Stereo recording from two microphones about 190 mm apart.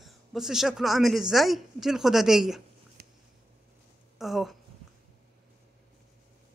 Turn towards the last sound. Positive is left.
turn(degrees=0)  # may be behind; listen again after turning